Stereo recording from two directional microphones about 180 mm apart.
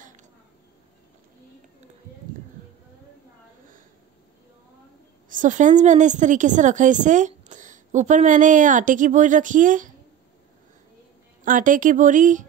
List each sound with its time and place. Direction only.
5.3 s a woman's voice: 45° right (ahead or behind)
11.4 s a woman's voice: 45° right (ahead or behind)